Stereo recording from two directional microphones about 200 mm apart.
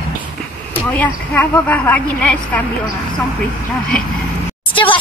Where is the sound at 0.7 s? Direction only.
10° left (ahead or behind).